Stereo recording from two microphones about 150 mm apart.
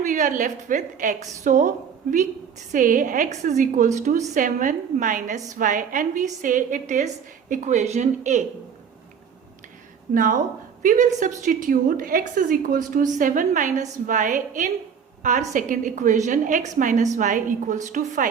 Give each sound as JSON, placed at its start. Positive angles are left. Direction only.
{"t": 0.0, "sound": "a woman's voice", "side_deg": -60}
{"t": 10.2, "sound": "a woman's voice", "side_deg": -65}